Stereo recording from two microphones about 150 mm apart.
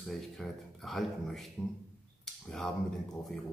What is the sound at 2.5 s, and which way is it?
Speech, 5° left (ahead or behind).